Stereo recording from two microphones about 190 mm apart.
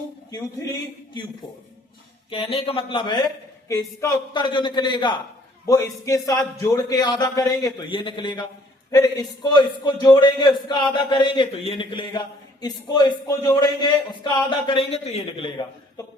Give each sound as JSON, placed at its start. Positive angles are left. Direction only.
{"t": 0.3, "sound": "speech", "side_deg": 20}
{"t": 2.3, "sound": "speech", "side_deg": 30}